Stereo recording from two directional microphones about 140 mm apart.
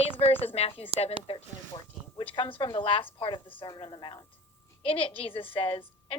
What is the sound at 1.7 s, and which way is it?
Speech, 35° left (ahead or behind).